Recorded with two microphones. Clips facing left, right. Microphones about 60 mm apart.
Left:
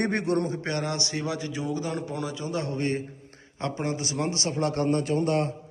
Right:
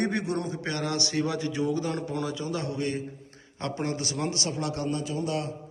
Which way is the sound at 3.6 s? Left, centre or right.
Left.